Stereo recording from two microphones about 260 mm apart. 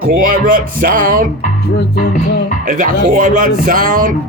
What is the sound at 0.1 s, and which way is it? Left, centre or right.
Speech, right.